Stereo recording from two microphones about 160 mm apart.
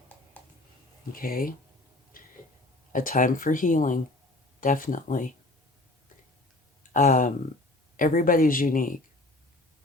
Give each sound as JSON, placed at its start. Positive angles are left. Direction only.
{"t": 0.4, "sound": "a sound", "side_deg": 10}
{"t": 1.1, "sound": "speech", "side_deg": 65}
{"t": 2.1, "sound": "tick-tock", "side_deg": 65}
{"t": 2.9, "sound": "speech", "side_deg": 55}
{"t": 6.9, "sound": "speech", "side_deg": 50}